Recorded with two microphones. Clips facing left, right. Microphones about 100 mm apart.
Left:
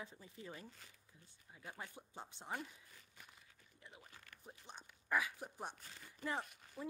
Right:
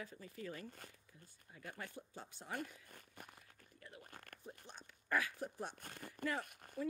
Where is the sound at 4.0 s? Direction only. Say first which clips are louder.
Right 5 dB; 50° right (ahead or behind).